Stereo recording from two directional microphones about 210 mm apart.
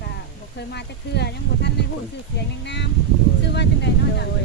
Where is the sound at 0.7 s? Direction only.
50° left (ahead or behind).